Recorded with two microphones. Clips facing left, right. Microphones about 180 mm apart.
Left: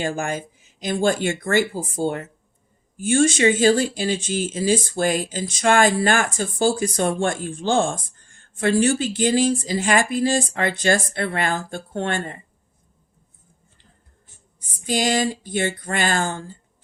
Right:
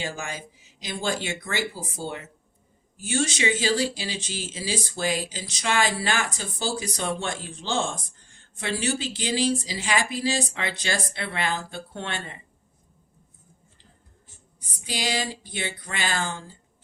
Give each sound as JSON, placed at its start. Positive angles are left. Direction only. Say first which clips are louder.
{"t": 0.0, "sound": "speech", "louder": "left 8 dB", "side_deg": 50}
{"t": 14.6, "sound": "speech", "louder": "left 9 dB", "side_deg": 45}